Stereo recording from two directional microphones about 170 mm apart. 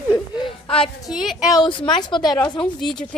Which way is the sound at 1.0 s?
Centre (ahead or behind).